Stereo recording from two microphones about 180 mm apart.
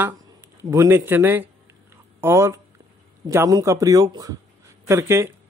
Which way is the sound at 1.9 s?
15° right (ahead or behind).